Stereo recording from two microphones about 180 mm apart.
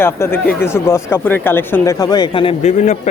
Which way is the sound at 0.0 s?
15° left (ahead or behind).